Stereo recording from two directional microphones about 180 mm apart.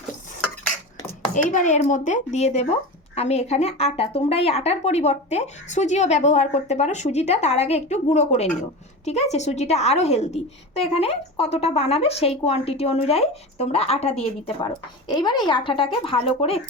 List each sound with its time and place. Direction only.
1.3 s a woman's voice: 45° left (ahead or behind)